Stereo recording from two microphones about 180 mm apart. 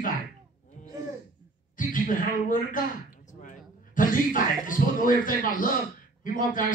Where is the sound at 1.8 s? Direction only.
50° left (ahead or behind).